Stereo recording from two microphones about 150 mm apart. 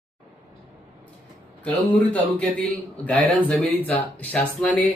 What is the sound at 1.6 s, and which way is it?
Speech, 10° left (ahead or behind).